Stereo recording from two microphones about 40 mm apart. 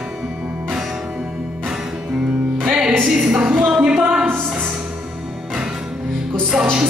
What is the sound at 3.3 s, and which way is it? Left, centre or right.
Music, right.